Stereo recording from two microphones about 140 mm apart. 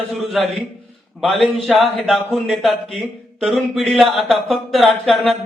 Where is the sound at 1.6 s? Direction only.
Centre (ahead or behind).